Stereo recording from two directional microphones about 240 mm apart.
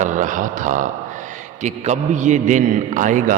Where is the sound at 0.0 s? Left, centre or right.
Right.